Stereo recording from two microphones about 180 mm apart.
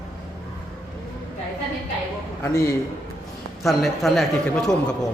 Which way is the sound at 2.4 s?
15° left (ahead or behind).